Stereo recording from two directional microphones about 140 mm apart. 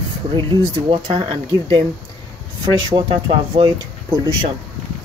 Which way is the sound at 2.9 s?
35° right (ahead or behind).